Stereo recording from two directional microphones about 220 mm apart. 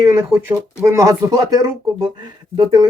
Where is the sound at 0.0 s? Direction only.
15° right (ahead or behind).